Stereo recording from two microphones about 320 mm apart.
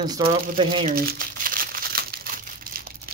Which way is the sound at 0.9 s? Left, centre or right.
Right.